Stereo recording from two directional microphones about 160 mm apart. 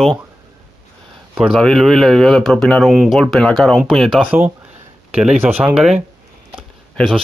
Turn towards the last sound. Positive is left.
turn(degrees=0)  # may be behind; listen again after turning